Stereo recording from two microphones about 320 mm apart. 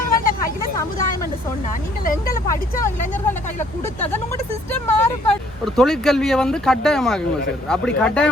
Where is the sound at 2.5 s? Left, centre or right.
Centre.